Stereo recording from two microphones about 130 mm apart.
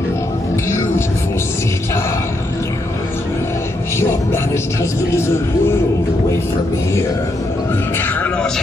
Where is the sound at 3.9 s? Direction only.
20° left (ahead or behind).